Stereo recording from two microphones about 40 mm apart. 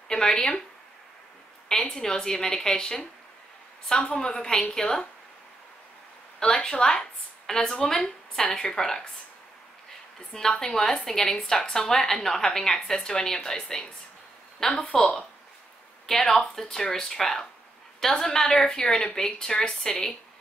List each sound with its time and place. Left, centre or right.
0.1 s speech: centre
1.7 s a woman's voice: centre
6.4 s a woman's voice: centre
10.3 s a woman's voice: centre
16.1 s a woman's voice: centre